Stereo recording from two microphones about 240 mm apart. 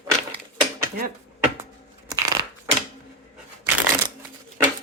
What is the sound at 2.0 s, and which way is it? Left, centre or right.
Crushing, centre.